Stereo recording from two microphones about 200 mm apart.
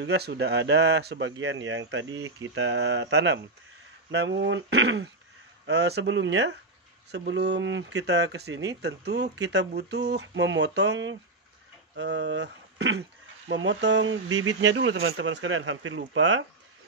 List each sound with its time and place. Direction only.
0.0 s speech: 55° right (ahead or behind)
1.4 s speech: 70° right (ahead or behind)